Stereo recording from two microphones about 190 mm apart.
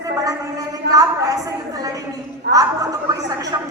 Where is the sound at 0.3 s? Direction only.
20° right (ahead or behind).